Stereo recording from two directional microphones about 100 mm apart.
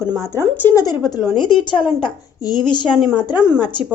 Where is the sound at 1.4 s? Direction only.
55° left (ahead or behind).